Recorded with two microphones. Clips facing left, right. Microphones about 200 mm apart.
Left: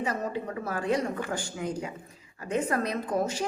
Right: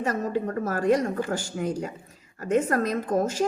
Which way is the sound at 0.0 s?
45° right (ahead or behind).